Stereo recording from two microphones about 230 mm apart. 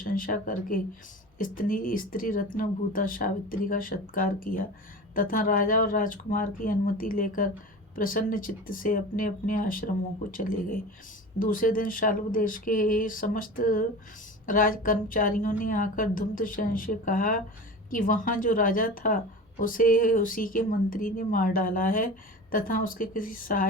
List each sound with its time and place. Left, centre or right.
0.0 s a woman's voice: left